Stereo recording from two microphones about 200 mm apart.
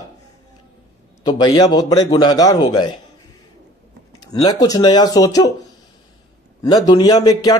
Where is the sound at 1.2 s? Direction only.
20° left (ahead or behind).